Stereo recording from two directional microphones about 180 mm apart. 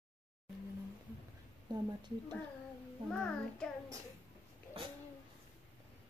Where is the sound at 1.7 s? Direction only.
25° right (ahead or behind).